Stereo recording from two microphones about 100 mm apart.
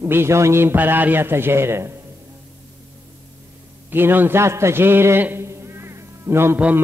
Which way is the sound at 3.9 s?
20° right (ahead or behind).